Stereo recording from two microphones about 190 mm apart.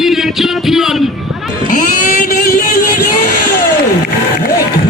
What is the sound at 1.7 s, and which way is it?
Vehicle, 45° left (ahead or behind).